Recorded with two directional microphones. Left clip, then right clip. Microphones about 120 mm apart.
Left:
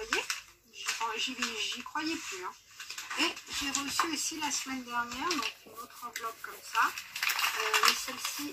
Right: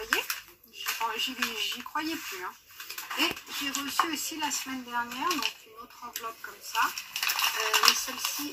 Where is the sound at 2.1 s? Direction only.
40° left (ahead or behind).